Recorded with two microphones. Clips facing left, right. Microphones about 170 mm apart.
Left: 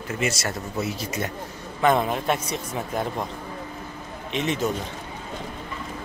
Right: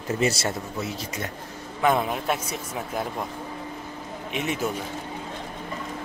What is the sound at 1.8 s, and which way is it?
Speech, 5° right (ahead or behind).